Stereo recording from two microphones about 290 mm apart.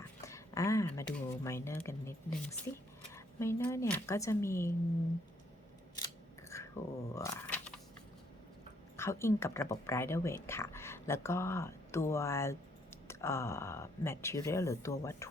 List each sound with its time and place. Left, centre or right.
0.3 s speech: centre
6.5 s a sound: centre
9.0 s speech: centre